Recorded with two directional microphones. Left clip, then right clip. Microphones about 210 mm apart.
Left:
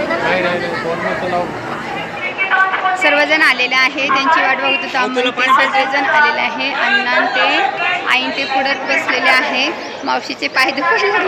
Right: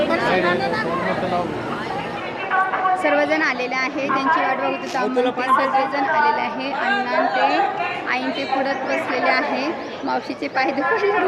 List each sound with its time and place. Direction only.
3.0 s a woman's voice: 5° right (ahead or behind)
5.1 s speech: 30° right (ahead or behind)
5.5 s a woman's voice: 5° left (ahead or behind)
8.6 s a woman's voice: centre (ahead or behind)